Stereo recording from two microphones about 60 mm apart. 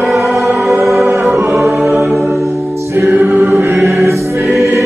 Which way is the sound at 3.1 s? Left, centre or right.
Right.